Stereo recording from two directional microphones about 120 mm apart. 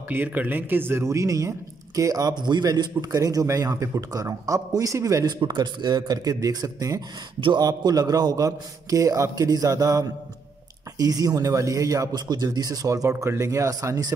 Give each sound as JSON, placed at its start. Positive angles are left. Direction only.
{"t": 0.1, "sound": "a man's voice", "side_deg": -15}